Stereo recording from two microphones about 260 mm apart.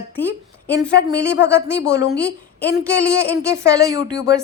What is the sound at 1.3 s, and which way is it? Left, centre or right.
Speech, left.